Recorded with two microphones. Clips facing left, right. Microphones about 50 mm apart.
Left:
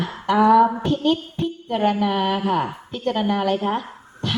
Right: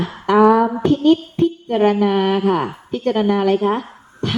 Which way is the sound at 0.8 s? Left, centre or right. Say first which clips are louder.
Right 6 dB; right.